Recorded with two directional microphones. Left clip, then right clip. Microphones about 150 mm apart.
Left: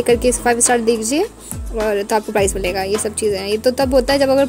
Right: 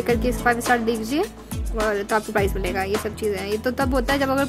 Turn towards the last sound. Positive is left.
turn(degrees=15)  # may be behind; listen again after turning